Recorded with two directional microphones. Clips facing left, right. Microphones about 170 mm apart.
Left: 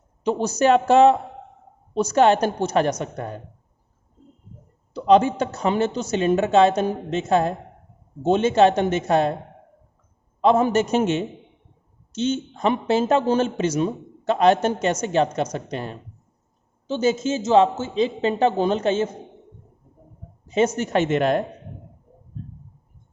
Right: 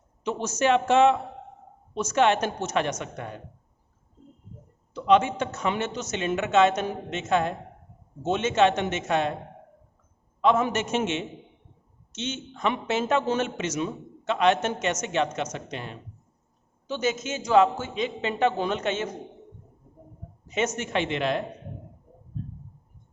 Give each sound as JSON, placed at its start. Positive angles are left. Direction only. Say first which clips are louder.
{"t": 0.3, "sound": "speech", "louder": "left 5 dB", "side_deg": 35}
{"t": 4.9, "sound": "speech", "louder": "left 5 dB", "side_deg": 35}
{"t": 10.4, "sound": "speech", "louder": "left 5 dB", "side_deg": 35}
{"t": 16.8, "sound": "speech", "louder": "left 7 dB", "side_deg": 30}
{"t": 20.5, "sound": "a woman's voice", "louder": "left 7 dB", "side_deg": 35}